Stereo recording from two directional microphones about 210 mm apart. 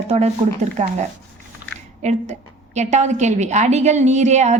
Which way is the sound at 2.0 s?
35° right (ahead or behind).